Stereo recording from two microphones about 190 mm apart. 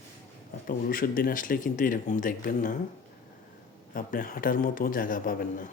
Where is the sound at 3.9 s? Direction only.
45° left (ahead or behind).